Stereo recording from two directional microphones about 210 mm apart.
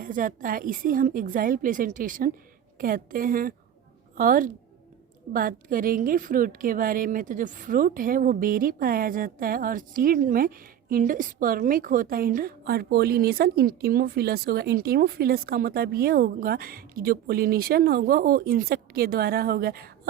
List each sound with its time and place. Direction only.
0.0 s a woman's voice: 40° right (ahead or behind)